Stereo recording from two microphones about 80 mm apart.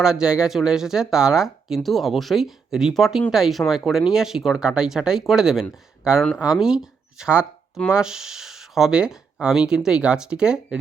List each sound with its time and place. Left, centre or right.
0.0 s speech: centre